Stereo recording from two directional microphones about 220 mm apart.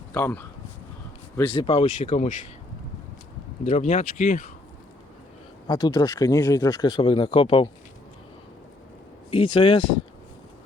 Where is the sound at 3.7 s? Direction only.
35° left (ahead or behind).